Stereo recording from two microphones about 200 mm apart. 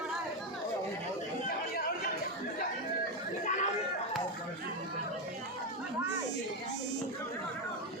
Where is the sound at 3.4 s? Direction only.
35° left (ahead or behind).